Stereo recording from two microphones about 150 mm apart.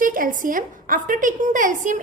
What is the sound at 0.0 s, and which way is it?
A woman's voice, 65° right (ahead or behind).